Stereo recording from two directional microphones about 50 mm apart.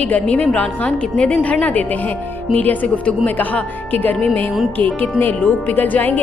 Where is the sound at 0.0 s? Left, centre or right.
Left.